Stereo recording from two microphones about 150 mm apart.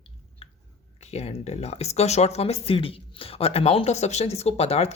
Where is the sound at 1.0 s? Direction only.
45° left (ahead or behind).